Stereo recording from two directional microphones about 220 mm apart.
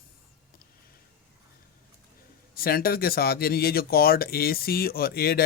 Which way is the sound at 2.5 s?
40° left (ahead or behind).